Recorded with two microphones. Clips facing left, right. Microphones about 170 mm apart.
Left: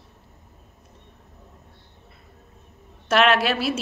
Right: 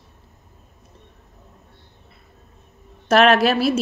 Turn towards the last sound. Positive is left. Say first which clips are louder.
# right 5 dB
turn(degrees=-40)  # may be behind; listen again after turning